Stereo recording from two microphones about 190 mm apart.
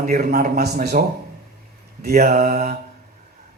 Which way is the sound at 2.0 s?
50° right (ahead or behind).